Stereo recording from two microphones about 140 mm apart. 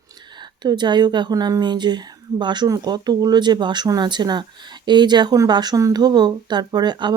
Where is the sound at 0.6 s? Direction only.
30° right (ahead or behind).